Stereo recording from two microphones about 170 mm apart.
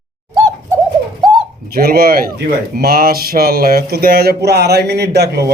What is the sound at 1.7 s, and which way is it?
A man's voice, 60° right (ahead or behind).